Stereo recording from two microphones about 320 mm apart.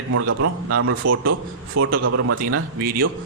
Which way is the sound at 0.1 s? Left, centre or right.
Right.